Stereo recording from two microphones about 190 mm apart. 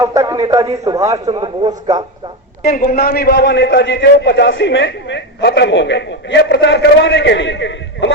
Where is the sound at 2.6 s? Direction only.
50° left (ahead or behind).